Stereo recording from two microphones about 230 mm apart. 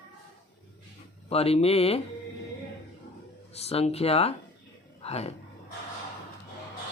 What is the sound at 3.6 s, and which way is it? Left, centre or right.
Speech, left.